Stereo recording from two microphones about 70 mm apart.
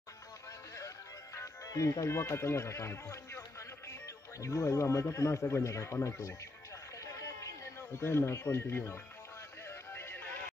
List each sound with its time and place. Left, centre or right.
0.7 s music: left
5.1 s speech: left
7.0 s a sound: left
9.7 s music: left